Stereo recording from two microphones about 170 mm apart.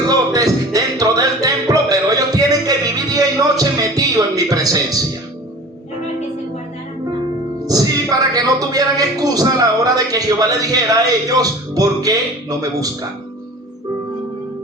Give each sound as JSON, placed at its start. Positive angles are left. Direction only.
{"t": 0.1, "sound": "music", "side_deg": -20}
{"t": 7.6, "sound": "speech", "side_deg": -20}